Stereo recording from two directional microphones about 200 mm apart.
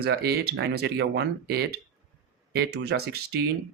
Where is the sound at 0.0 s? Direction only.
55° right (ahead or behind).